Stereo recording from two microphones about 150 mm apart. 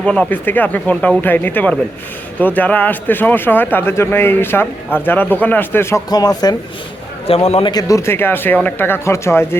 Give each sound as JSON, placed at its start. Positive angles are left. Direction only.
{"t": 0.0, "sound": "speech", "side_deg": 10}
{"t": 7.3, "sound": "a man's voice", "side_deg": 40}
{"t": 7.7, "sound": "speech", "side_deg": 25}